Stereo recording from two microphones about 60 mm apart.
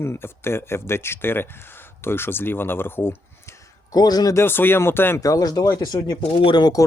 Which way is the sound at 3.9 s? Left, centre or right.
Left.